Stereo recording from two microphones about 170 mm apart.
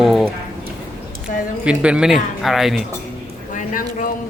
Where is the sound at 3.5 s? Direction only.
50° left (ahead or behind).